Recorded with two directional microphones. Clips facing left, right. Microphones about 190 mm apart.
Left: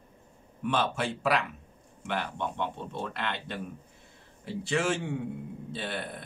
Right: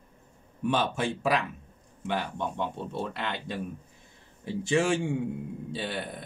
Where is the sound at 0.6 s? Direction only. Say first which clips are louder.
Right 2 dB; 15° right (ahead or behind).